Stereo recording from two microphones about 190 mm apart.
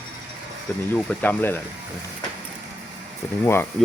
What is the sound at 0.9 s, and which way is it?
Speech, 10° left (ahead or behind).